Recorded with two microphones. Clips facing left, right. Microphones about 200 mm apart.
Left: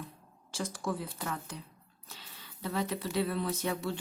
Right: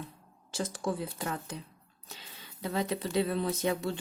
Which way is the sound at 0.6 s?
25° right (ahead or behind).